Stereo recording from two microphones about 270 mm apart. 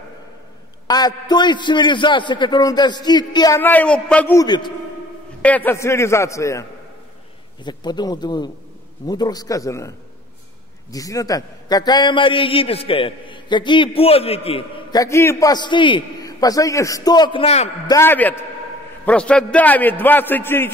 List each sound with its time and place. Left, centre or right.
0.8 s a man's voice: centre
7.6 s a man's voice: centre
17.9 s a man's voice: centre